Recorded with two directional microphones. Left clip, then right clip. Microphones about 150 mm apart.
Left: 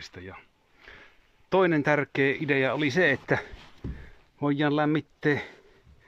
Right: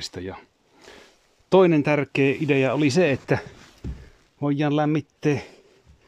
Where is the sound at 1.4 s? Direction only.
20° right (ahead or behind).